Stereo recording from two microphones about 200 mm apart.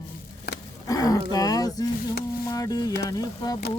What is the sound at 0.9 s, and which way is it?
Speech, 20° left (ahead or behind).